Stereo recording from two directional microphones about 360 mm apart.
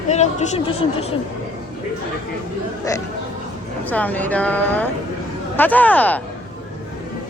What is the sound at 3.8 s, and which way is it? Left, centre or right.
Speech, centre.